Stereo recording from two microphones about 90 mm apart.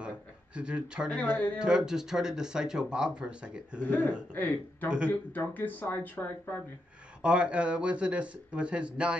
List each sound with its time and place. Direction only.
0.6 s speech: 10° right (ahead or behind)
1.1 s speech: 20° left (ahead or behind)
1.6 s speech: 5° right (ahead or behind)
3.8 s speech: 25° left (ahead or behind)
4.8 s speech: 10° right (ahead or behind)
5.3 s speech: 20° left (ahead or behind)
7.2 s speech: 10° right (ahead or behind)